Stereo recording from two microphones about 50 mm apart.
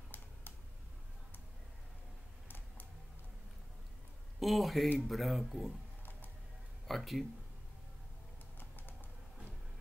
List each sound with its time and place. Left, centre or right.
2.4 s a sound: left
4.4 s speech: centre
6.9 s speech: centre
8.5 s typing: left